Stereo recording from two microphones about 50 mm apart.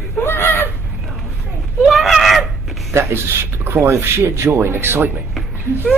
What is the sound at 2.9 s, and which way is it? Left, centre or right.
Speech, right.